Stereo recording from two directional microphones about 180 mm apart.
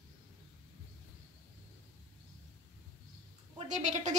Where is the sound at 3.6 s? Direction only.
45° right (ahead or behind).